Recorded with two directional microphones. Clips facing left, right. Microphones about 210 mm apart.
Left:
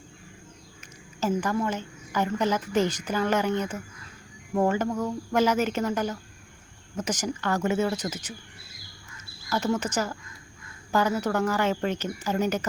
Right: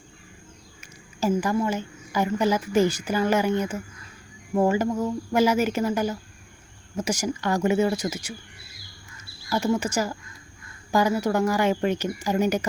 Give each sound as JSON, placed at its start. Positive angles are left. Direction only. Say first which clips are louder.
{"t": 0.8, "sound": "a sound", "louder": "right 3 dB", "side_deg": -10}
{"t": 1.5, "sound": "a woman's voice", "louder": "right 3 dB", "side_deg": -10}
{"t": 9.5, "sound": "a woman's voice", "louder": "right 3 dB", "side_deg": -10}